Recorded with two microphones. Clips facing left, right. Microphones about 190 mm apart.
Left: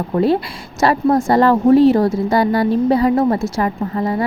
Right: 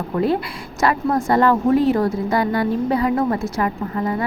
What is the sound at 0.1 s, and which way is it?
A woman's voice, 25° left (ahead or behind).